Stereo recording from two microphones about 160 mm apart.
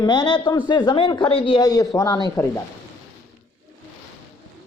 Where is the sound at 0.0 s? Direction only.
25° left (ahead or behind).